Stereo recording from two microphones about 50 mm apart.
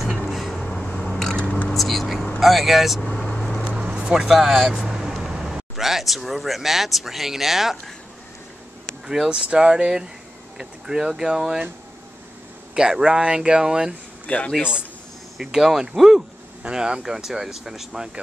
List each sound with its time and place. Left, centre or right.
0.3 s a sound: centre
0.7 s a sound: centre
1.7 s vehicle: centre
2.4 s speech: centre
3.1 s vehicle: centre
3.6 s vehicle: right
4.3 s speech: centre
9.0 s speech: centre
12.7 s speech: centre
14.2 s a man's voice: left
15.3 s speech: centre